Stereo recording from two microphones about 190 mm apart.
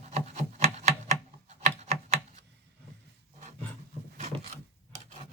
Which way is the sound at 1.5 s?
35° right (ahead or behind).